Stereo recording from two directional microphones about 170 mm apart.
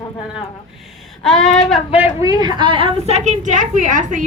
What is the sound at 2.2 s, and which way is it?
A woman's voice, 25° right (ahead or behind).